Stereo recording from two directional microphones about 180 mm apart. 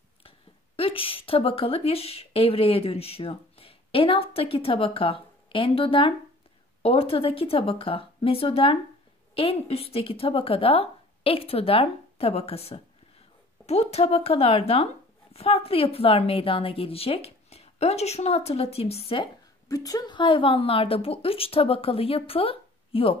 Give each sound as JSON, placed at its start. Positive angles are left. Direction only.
{"t": 0.7, "sound": "speech", "side_deg": 30}
{"t": 19.7, "sound": "speech", "side_deg": 20}